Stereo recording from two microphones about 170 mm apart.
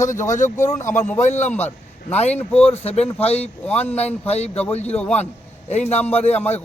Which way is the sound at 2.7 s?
35° left (ahead or behind).